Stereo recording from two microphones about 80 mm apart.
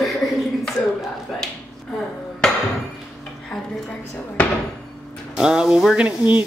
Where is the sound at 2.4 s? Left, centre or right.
Centre.